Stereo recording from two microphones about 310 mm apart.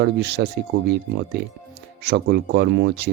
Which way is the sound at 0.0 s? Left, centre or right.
Right.